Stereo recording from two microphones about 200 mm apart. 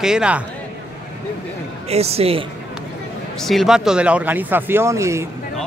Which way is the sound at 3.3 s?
Centre (ahead or behind).